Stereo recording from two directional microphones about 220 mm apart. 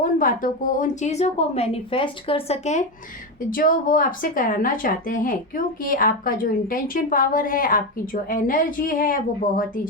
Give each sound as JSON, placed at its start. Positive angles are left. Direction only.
{"t": 0.0, "sound": "a woman's voice", "side_deg": 40}